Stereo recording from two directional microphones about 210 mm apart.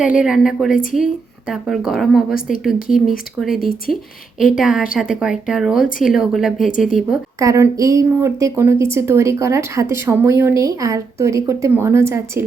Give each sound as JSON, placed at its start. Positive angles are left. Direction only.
{"t": 0.0, "sound": "speech", "side_deg": -5}
{"t": 2.7, "sound": "speech", "side_deg": 40}
{"t": 4.4, "sound": "speech", "side_deg": 0}
{"t": 6.7, "sound": "speech", "side_deg": 40}
{"t": 7.3, "sound": "speech", "side_deg": -15}